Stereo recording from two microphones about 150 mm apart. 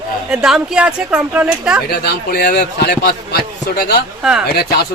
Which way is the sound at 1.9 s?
90° left.